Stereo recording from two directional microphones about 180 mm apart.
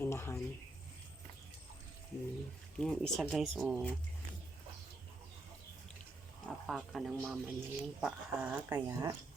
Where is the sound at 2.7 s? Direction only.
5° left (ahead or behind).